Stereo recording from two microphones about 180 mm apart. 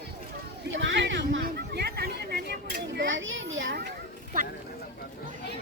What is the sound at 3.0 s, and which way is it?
Speech, 90° right.